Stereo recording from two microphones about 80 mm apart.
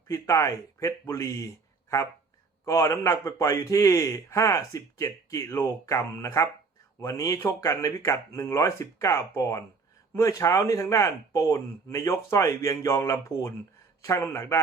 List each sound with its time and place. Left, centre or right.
0.1 s a man's voice: left
2.6 s a man's voice: left